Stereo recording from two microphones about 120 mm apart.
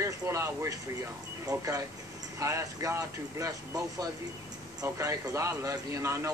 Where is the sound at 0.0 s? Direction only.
25° right (ahead or behind).